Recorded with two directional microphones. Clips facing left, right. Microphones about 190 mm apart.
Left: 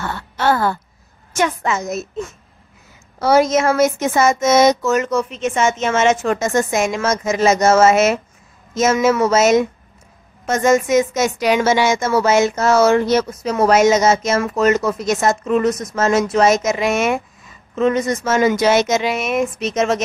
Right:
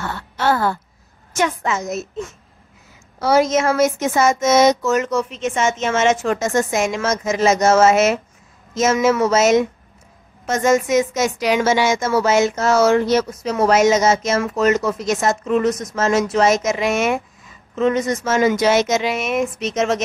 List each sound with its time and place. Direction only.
0.4 s speech: 55° left (ahead or behind)
3.2 s speech: 55° left (ahead or behind)